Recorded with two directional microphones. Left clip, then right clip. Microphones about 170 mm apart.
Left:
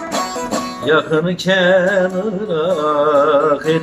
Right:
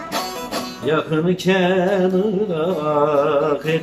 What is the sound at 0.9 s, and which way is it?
Music, 10° right (ahead or behind).